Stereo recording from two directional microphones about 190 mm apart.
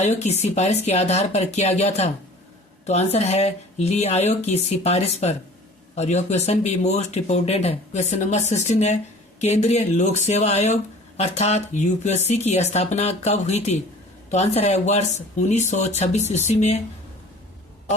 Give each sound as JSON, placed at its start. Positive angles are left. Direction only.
{"t": 0.0, "sound": "speech", "side_deg": 35}